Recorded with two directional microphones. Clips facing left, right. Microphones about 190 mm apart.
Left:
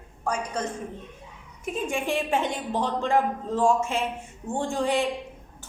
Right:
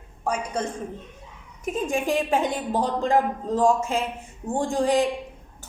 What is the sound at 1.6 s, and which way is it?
A woman's voice, 40° right (ahead or behind).